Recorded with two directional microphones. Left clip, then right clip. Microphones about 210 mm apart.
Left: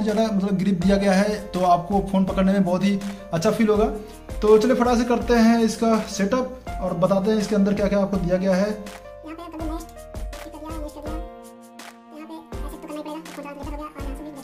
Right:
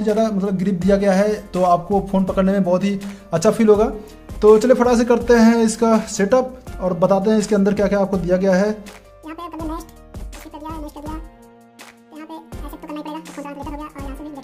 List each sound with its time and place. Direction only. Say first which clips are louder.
0.0 s speech: right 4 dB; 30° right (ahead or behind); by 8.7 s 50° right (ahead or behind)
9.3 s music: right 4 dB; 20° right (ahead or behind)
12.8 s music: right 4 dB; 20° right (ahead or behind)